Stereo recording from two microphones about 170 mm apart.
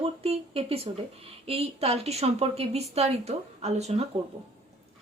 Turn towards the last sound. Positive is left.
turn(degrees=-40)  # may be behind; listen again after turning